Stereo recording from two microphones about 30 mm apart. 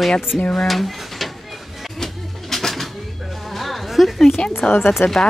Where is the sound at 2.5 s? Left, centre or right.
Centre.